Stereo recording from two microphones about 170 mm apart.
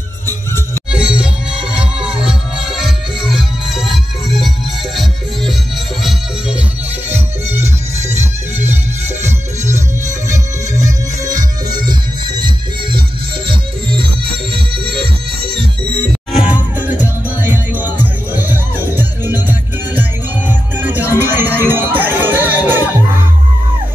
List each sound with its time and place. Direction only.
0.9 s music: 5° right (ahead or behind)
7.1 s music: 15° right (ahead or behind)
9.2 s music: 15° right (ahead or behind); by 15.6 s 30° right (ahead or behind)
16.3 s music: 10° right (ahead or behind)